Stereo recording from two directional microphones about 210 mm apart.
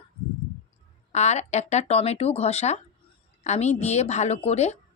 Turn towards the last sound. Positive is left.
turn(degrees=30)  # may be behind; listen again after turning